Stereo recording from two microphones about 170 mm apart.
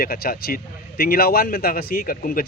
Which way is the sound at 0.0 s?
60° left (ahead or behind).